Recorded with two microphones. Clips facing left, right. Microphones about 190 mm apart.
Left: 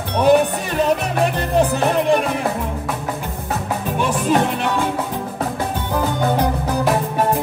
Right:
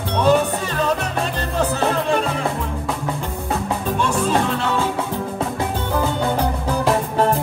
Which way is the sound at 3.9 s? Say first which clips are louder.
Left 2 dB; 15° left (ahead or behind).